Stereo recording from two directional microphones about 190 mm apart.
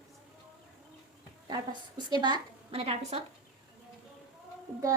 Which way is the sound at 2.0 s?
25° right (ahead or behind).